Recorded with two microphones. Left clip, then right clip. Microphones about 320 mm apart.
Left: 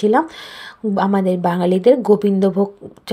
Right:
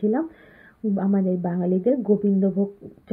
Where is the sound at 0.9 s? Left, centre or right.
Centre.